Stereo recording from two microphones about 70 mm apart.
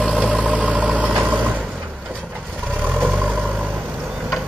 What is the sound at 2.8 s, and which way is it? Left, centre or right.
Vehicle, right.